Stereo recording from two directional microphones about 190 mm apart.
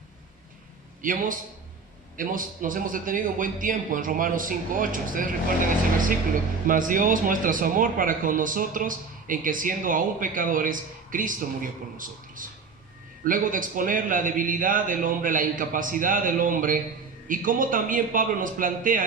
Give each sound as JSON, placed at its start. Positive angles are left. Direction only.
{"t": 1.0, "sound": "speech", "side_deg": -45}
{"t": 6.7, "sound": "speech", "side_deg": -45}